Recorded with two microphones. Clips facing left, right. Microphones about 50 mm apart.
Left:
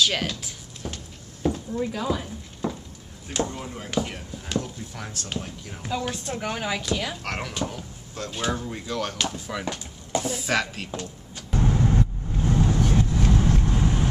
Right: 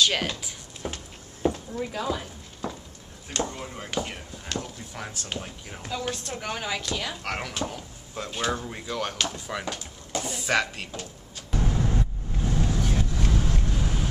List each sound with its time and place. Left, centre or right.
0.0 s speech: centre
0.8 s a sound: centre
1.7 s a sound: centre
3.3 s speech: centre
5.8 s speech: centre
8.1 s speech: centre
8.4 s speech: centre
11.7 s vehicle: centre
12.4 s vehicle: left